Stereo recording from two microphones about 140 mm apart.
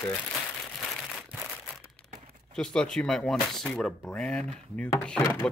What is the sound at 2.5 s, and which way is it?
Speech, 5° left (ahead or behind).